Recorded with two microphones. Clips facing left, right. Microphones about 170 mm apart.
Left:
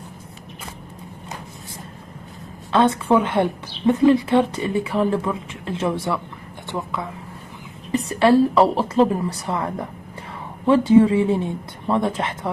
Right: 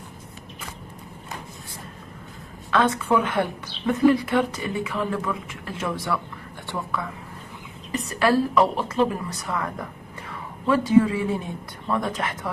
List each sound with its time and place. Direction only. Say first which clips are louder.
2.7 s a woman's voice: left 4 dB; 30° left (ahead or behind)